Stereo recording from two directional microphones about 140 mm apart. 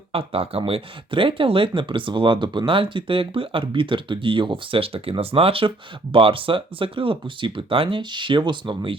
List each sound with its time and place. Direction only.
0.1 s speech: 45° right (ahead or behind)